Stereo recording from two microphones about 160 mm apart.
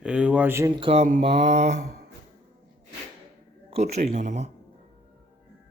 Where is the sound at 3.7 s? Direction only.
45° right (ahead or behind).